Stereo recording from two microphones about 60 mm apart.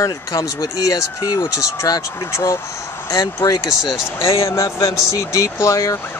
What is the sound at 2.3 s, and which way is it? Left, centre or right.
Speech, left.